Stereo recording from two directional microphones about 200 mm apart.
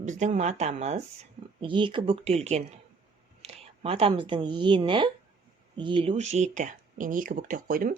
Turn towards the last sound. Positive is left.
turn(degrees=-45)  # may be behind; listen again after turning